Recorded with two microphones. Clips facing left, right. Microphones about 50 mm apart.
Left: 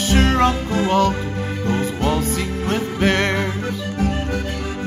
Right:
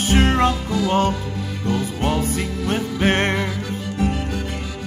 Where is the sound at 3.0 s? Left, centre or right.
Right.